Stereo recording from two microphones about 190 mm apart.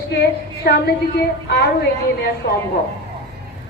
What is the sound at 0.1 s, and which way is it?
A woman's voice, 55° left (ahead or behind).